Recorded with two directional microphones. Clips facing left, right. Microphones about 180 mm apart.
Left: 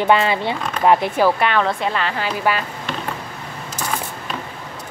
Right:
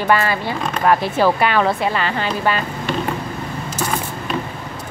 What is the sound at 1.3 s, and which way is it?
Speech, 5° right (ahead or behind).